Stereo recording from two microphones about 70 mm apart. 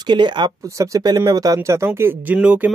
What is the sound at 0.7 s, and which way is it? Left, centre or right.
Speech, right.